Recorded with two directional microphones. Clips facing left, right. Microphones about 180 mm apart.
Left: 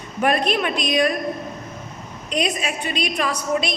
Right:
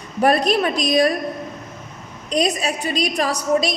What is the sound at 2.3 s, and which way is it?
A woman's voice, 35° right (ahead or behind).